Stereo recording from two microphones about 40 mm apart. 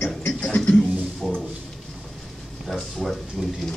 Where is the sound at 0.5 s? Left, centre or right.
Left.